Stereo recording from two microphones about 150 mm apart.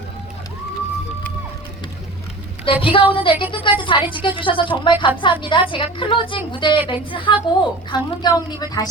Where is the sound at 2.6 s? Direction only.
35° left (ahead or behind).